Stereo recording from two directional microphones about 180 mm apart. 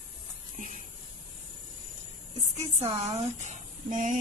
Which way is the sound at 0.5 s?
45° right (ahead or behind).